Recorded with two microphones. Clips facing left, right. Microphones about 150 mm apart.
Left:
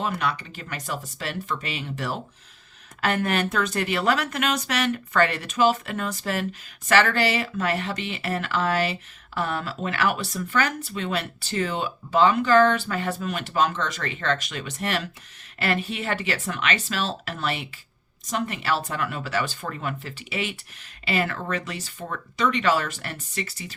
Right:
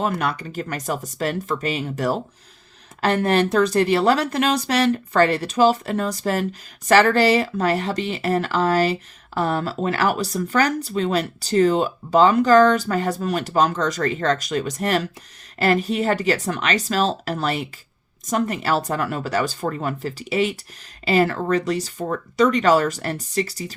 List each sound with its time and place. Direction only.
0.0 s speech: 45° right (ahead or behind)